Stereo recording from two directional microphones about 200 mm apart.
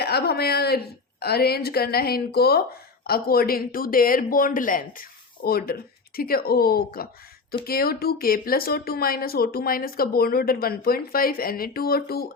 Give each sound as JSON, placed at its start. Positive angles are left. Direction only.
{"t": 0.0, "sound": "a woman's voice", "side_deg": 55}